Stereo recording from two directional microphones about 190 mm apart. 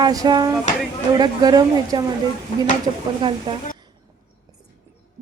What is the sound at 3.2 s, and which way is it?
Speech, 25° right (ahead or behind).